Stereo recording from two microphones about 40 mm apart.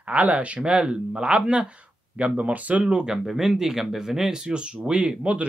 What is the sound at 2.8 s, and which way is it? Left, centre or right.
Speech, right.